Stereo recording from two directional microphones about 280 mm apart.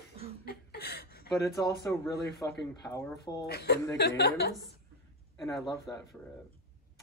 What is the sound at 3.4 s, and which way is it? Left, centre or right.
A woman's voice, left.